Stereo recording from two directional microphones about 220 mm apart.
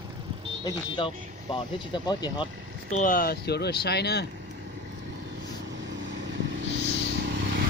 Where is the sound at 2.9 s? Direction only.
40° left (ahead or behind).